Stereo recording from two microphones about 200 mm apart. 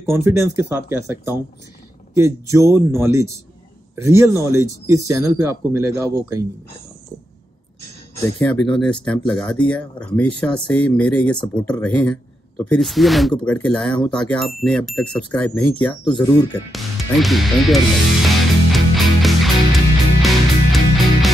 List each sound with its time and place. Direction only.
0.0 s speech: 10° right (ahead or behind)
8.4 s speech: 5° left (ahead or behind)
16.0 s speech: 20° left (ahead or behind)
16.7 s music: centre (ahead or behind)